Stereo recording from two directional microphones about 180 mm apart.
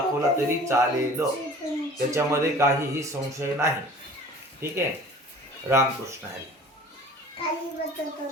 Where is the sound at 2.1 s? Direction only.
15° right (ahead or behind).